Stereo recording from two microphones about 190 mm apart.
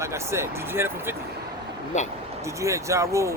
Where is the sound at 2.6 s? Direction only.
15° right (ahead or behind).